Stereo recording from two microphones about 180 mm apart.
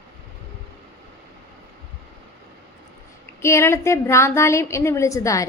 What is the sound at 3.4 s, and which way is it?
A woman's voice, 15° left (ahead or behind).